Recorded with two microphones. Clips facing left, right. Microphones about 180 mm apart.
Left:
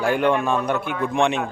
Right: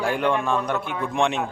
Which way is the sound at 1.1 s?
Centre (ahead or behind).